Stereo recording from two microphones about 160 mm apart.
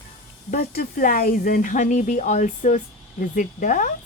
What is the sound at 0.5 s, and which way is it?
A woman's voice, 65° left (ahead or behind).